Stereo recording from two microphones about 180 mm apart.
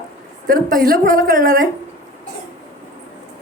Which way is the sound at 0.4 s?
50° right (ahead or behind).